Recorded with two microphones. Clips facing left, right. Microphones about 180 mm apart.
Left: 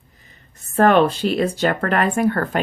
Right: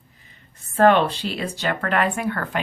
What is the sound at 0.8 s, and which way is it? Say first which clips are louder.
Speech: left 2 dB; 45° left (ahead or behind).